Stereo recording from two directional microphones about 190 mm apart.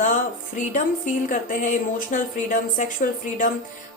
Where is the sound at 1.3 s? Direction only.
45° left (ahead or behind).